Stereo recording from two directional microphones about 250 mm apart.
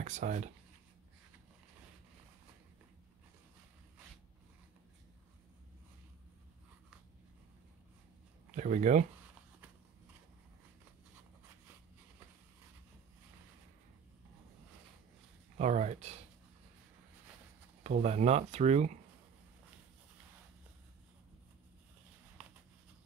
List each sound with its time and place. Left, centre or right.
0.0 s speech: right
8.5 s speech: right
15.5 s speech: right
17.8 s speech: right